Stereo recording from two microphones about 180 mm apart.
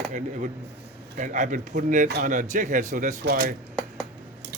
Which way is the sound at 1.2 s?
45° right (ahead or behind).